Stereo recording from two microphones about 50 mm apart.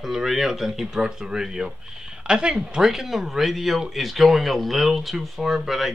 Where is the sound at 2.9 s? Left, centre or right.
Centre.